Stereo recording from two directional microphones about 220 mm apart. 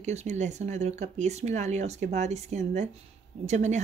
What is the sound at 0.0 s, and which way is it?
Speech, 30° right (ahead or behind).